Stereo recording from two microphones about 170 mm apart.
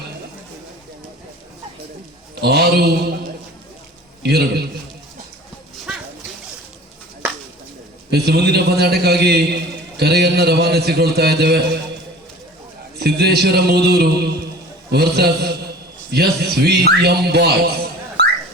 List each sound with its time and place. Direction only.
2.3 s a man's voice: 70° right (ahead or behind)
4.2 s a man's voice: 70° right (ahead or behind)
5.9 s a sound: 5° right (ahead or behind)
8.1 s a man's voice: 70° right (ahead or behind)
13.0 s a man's voice: 70° right (ahead or behind)
18.2 s a sound: 85° right